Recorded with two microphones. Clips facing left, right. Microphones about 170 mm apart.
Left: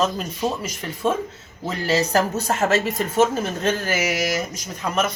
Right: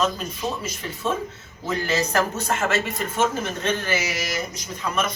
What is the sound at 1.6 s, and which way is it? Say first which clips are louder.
A woman's voice: left 2 dB; 35° left (ahead or behind).